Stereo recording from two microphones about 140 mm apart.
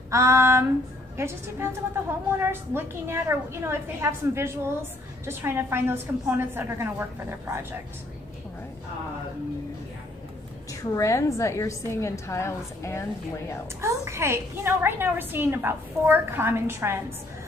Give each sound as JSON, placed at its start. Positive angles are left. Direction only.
{"t": 0.1, "sound": "a woman's voice", "side_deg": -20}
{"t": 10.7, "sound": "a woman's voice", "side_deg": 25}
{"t": 13.7, "sound": "a woman's voice", "side_deg": -20}